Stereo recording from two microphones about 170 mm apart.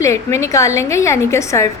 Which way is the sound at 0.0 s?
15° left (ahead or behind).